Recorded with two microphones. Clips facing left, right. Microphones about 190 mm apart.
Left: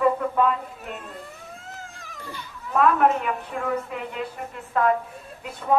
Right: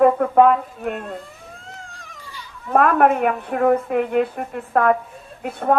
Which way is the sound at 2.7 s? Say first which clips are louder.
Right 4 dB; 60° right (ahead or behind).